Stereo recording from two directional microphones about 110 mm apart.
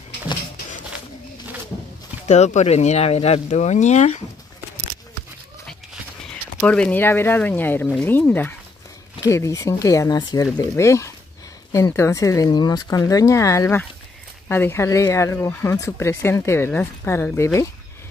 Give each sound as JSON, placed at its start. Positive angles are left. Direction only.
{"t": 2.2, "sound": "speech", "side_deg": 90}
{"t": 3.4, "sound": "speech", "side_deg": 90}
{"t": 6.6, "sound": "speech", "side_deg": 15}
{"t": 9.2, "sound": "speech", "side_deg": 30}